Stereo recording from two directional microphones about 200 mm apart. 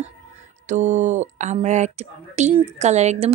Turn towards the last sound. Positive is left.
turn(degrees=-35)  # may be behind; listen again after turning